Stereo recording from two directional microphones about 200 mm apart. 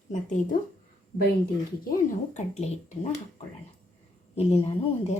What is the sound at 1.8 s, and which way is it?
Speech, 45° left (ahead or behind).